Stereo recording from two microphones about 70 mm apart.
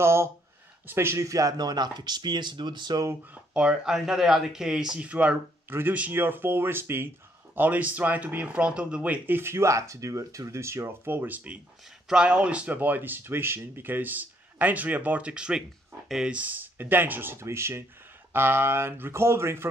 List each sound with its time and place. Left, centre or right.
0.0 s speech: right
3.5 s speech: centre
5.7 s speech: right